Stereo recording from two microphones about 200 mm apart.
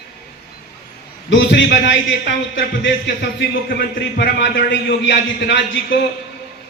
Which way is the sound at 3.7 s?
55° left (ahead or behind).